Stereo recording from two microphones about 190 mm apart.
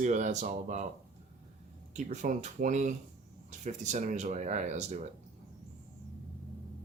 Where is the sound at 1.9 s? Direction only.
40° right (ahead or behind).